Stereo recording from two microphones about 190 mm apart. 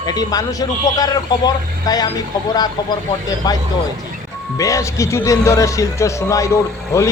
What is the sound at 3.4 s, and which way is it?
Speech, 20° left (ahead or behind).